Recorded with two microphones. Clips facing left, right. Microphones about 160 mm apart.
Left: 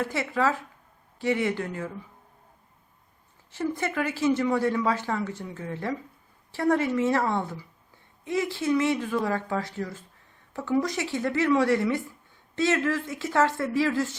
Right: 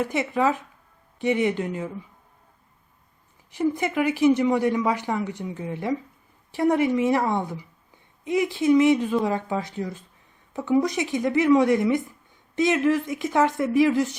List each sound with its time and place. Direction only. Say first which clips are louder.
0.0 s speech: right 3 dB; 20° right (ahead or behind)
3.5 s speech: right 5 dB; 15° right (ahead or behind)